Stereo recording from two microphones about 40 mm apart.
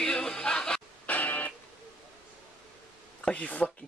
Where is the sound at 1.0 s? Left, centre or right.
Left.